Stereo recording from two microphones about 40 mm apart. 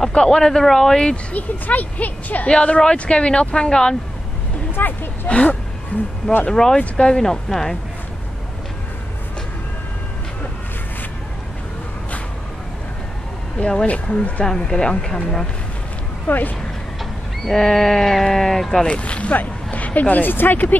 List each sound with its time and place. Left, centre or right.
0.1 s speech: left
0.4 s speech: centre
1.1 s speech: left
2.4 s speech: left
4.7 s speech: left
6.4 s speech: centre
6.8 s speech: left
7.2 s speech: centre
13.8 s speech: left
14.6 s speech: left
16.3 s speech: left
17.5 s speech: centre
18.8 s speech: left